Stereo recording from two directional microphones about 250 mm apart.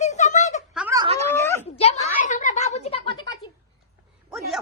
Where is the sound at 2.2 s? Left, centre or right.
Left.